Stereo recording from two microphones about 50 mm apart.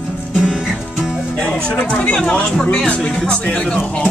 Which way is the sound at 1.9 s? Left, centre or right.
Left.